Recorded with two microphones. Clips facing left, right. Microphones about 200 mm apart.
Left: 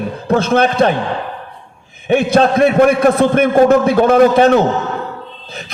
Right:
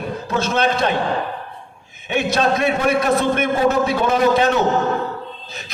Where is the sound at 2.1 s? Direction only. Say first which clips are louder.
Left 7 dB; 55° left (ahead or behind).